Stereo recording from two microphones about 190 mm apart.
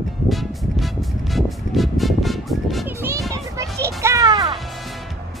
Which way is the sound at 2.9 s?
15° right (ahead or behind).